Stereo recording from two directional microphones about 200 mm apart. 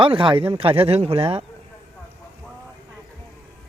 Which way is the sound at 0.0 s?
25° right (ahead or behind).